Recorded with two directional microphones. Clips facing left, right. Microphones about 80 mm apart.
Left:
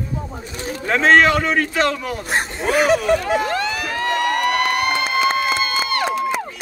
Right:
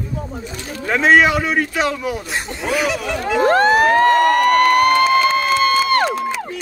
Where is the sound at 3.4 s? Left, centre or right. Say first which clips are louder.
Right 10 dB; right.